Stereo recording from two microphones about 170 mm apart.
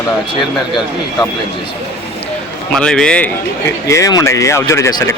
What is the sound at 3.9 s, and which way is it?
Speech, 20° left (ahead or behind).